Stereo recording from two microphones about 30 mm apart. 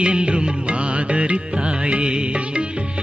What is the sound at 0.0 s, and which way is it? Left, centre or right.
Music, right.